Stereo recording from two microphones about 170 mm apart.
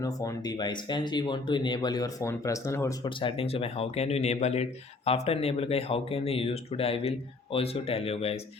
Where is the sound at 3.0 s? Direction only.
30° left (ahead or behind).